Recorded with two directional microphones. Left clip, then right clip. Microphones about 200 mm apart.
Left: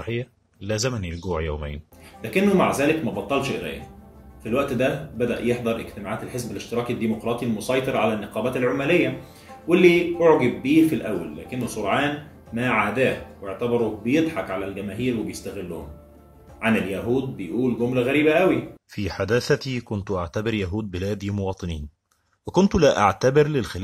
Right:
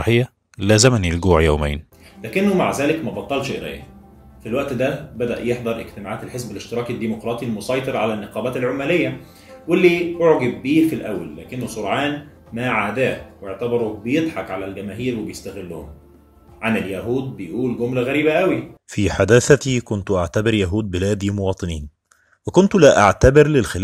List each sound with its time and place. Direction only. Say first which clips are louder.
0.0 s speech: right 11 dB; 50° right (ahead or behind)
2.2 s speech: right 1 dB; 5° right (ahead or behind)
16.6 s speech: right 1 dB; 5° right (ahead or behind)
18.9 s speech: right 10 dB; 25° right (ahead or behind)
19.9 s speech: right 6 dB; 10° right (ahead or behind)